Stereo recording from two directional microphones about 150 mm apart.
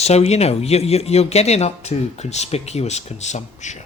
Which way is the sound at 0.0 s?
45° left (ahead or behind).